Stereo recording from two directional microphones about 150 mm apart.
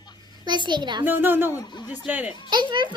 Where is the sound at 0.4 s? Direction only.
30° right (ahead or behind).